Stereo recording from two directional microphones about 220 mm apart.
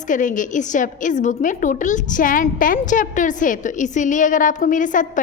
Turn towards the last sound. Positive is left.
turn(degrees=35)  # may be behind; listen again after turning